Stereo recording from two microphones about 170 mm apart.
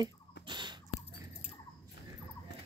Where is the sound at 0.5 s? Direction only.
25° right (ahead or behind).